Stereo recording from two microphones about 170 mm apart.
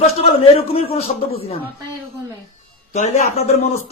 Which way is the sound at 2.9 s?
40° left (ahead or behind).